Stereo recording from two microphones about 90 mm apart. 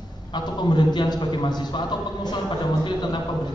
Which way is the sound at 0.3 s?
50° left (ahead or behind).